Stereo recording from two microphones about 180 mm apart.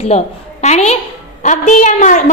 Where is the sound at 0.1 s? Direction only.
40° left (ahead or behind).